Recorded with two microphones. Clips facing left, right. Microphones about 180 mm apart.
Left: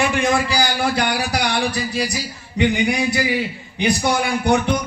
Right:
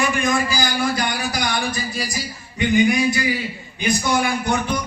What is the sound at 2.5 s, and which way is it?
A man's voice, 70° left (ahead or behind).